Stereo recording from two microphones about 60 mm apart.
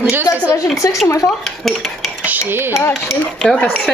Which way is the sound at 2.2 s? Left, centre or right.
Right.